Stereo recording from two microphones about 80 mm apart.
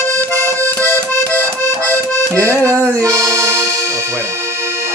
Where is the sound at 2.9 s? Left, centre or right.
Right.